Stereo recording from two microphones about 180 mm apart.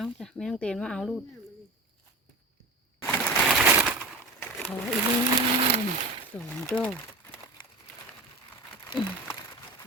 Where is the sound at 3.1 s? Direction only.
5° left (ahead or behind).